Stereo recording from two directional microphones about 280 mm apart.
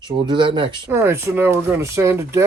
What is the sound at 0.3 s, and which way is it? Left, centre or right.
Speech, centre.